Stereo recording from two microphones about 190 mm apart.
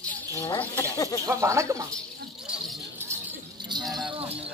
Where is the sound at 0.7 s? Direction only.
15° left (ahead or behind).